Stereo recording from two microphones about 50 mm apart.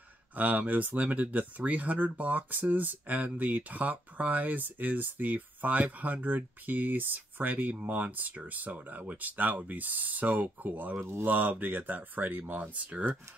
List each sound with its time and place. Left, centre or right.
0.4 s speech: right